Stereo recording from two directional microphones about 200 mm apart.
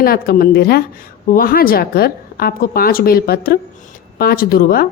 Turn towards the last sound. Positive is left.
turn(degrees=50)  # may be behind; listen again after turning